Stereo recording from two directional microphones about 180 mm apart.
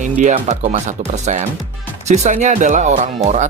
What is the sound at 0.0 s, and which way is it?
Speech, 40° right (ahead or behind).